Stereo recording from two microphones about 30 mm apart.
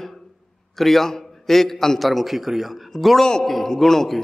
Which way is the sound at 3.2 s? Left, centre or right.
Left.